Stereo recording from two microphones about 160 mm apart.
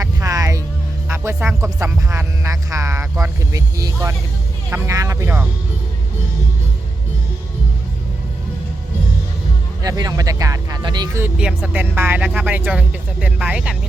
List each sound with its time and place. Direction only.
0.0 s music: 20° right (ahead or behind)
1.0 s speech: 15° right (ahead or behind)
9.8 s speech: 20° right (ahead or behind)
11.2 s speech: 5° right (ahead or behind)